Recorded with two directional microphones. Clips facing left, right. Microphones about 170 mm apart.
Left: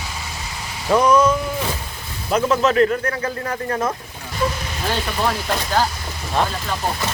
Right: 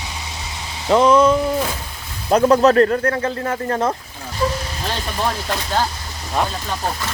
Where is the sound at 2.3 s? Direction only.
35° right (ahead or behind).